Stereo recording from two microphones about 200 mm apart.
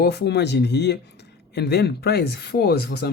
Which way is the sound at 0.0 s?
55° left (ahead or behind).